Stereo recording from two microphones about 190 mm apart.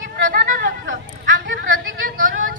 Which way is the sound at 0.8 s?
75° right (ahead or behind).